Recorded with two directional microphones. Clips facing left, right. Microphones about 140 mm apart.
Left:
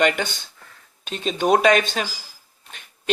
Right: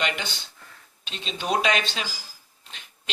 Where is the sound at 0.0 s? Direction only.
50° left (ahead or behind).